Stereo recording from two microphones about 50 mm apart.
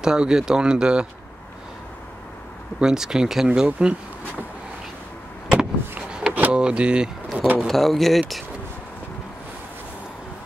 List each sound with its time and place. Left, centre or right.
0.0 s speech: centre
2.8 s speech: centre
3.8 s speech: right
5.5 s vehicle: centre
6.5 s speech: centre
7.3 s speech: right
7.6 s speech: centre